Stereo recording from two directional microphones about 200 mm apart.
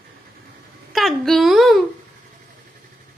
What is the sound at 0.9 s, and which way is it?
Speech, centre (ahead or behind).